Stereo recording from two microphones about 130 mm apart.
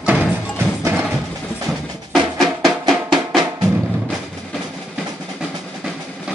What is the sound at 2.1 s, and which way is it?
Drum, centre (ahead or behind).